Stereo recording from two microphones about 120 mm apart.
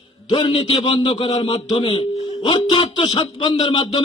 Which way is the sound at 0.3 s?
45° left (ahead or behind).